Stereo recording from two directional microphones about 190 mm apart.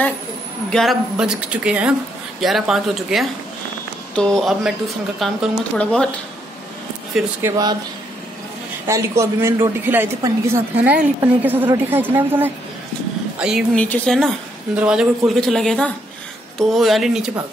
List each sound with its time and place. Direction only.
0.7 s speech: centre (ahead or behind)
7.4 s speech: 20° right (ahead or behind)
8.8 s a woman's voice: 15° right (ahead or behind)